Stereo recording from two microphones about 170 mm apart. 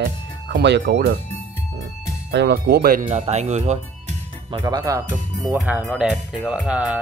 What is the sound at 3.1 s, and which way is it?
Speech, 40° right (ahead or behind).